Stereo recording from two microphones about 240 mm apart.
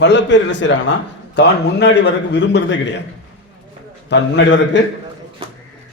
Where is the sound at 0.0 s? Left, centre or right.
Left.